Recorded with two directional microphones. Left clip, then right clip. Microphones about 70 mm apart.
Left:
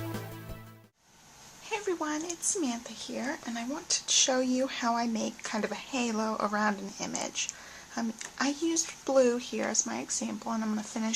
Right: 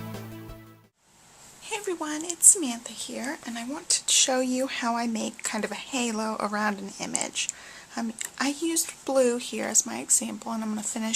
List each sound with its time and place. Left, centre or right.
1.7 s speech: right